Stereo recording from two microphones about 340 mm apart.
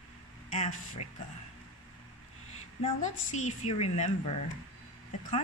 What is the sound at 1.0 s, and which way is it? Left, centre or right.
Speech, left.